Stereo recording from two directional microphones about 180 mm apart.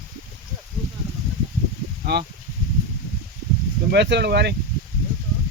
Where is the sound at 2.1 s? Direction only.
70° right (ahead or behind).